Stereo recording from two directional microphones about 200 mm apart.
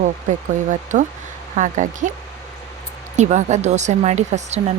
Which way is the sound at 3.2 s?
35° right (ahead or behind).